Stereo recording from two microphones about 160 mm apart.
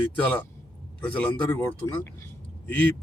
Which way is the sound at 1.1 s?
10° left (ahead or behind).